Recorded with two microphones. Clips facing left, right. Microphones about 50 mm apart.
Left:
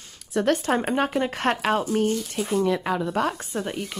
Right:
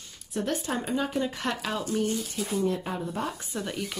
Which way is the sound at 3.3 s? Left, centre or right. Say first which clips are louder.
Left 5 dB; left.